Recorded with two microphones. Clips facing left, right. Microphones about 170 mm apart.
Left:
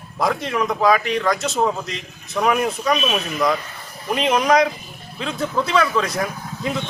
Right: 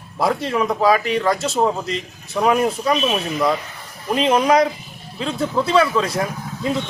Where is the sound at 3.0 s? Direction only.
5° right (ahead or behind).